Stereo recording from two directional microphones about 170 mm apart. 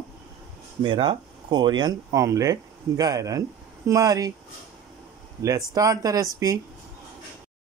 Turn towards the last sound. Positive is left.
turn(degrees=-20)  # may be behind; listen again after turning